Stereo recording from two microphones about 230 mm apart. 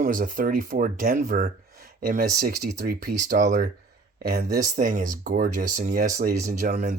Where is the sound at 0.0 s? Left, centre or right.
Right.